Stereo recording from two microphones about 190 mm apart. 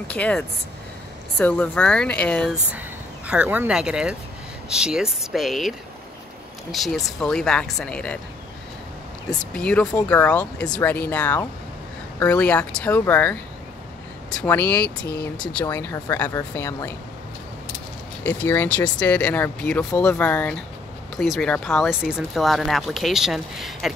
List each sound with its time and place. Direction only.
0.1 s speech: 5° left (ahead or behind)
9.3 s speech: 5° left (ahead or behind)
18.2 s speech: 10° left (ahead or behind)